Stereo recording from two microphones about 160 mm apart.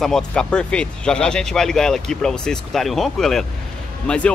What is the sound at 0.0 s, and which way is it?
Speech, 5° left (ahead or behind).